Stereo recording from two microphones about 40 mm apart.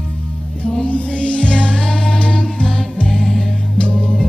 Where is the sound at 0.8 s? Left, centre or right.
Left.